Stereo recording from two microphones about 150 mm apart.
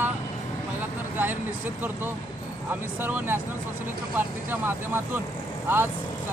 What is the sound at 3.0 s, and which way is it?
Speech, 15° right (ahead or behind).